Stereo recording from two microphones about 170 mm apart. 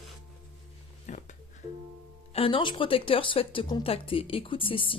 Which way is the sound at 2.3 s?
30° left (ahead or behind).